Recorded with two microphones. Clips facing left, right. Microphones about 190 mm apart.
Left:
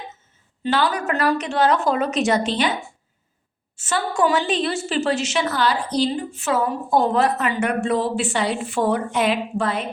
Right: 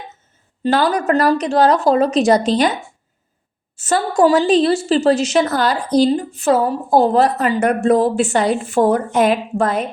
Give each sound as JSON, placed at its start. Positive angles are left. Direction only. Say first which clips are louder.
{"t": 0.6, "sound": "a woman's voice", "louder": "right 5 dB", "side_deg": -40}
{"t": 3.8, "sound": "a woman's voice", "louder": "right 6 dB", "side_deg": -40}